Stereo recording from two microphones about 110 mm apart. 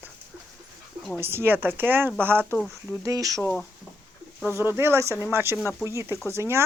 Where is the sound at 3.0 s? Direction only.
30° right (ahead or behind).